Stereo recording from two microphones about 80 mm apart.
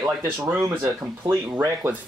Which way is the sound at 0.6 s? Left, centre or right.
Right.